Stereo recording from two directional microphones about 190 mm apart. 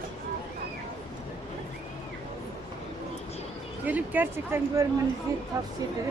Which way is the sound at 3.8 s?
10° right (ahead or behind).